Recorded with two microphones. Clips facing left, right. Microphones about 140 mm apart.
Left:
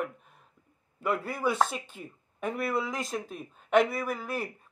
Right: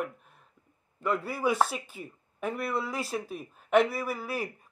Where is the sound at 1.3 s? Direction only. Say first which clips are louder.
Right 2 dB; 10° right (ahead or behind).